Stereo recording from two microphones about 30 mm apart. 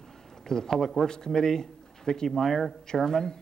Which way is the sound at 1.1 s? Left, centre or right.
Left.